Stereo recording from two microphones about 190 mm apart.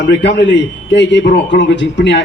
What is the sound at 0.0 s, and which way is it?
A man's voice, 65° left (ahead or behind).